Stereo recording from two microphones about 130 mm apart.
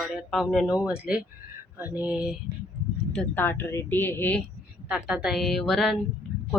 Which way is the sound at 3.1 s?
10° left (ahead or behind).